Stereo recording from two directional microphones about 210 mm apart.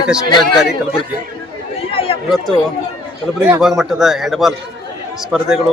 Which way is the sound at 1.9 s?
25° left (ahead or behind).